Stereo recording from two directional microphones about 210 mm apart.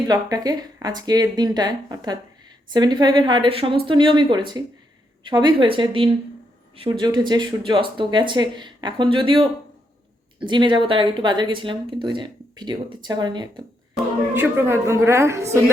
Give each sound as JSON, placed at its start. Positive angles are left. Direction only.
{"t": 0.1, "sound": "speech", "side_deg": -15}
{"t": 13.9, "sound": "a woman's voice", "side_deg": -10}